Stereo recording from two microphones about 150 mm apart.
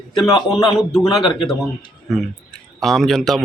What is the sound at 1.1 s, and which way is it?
Speech, 30° left (ahead or behind).